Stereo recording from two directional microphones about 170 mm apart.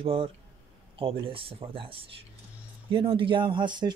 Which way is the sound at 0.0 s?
35° right (ahead or behind).